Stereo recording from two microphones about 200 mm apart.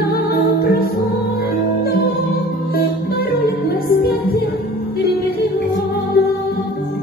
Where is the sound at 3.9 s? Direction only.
50° left (ahead or behind).